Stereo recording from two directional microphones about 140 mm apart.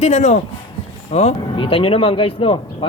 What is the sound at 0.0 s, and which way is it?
A woman's voice, 55° left (ahead or behind).